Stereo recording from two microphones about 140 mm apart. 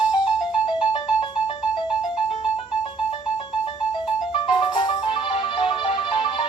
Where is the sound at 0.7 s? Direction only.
35° left (ahead or behind).